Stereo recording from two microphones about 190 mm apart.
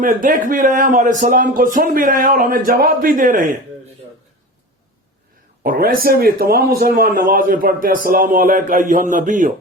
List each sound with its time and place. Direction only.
0.0 s speech: 45° right (ahead or behind)
5.6 s speech: 50° right (ahead or behind)